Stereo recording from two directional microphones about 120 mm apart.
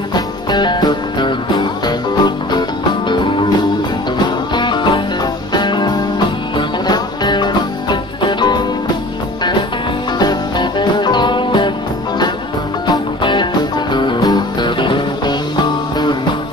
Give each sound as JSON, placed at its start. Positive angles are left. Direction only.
{"t": 0.1, "sound": "music", "side_deg": 40}
{"t": 4.6, "sound": "music", "side_deg": 40}
{"t": 10.1, "sound": "music", "side_deg": 35}
{"t": 12.8, "sound": "music", "side_deg": 40}